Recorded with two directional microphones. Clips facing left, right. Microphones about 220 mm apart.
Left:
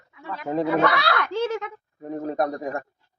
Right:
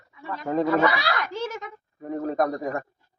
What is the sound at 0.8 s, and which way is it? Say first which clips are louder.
Speech: left 1 dB; 60° left (ahead or behind).